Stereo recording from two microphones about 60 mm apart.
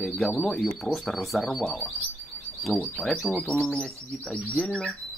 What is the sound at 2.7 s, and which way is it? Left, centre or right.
Bird, left.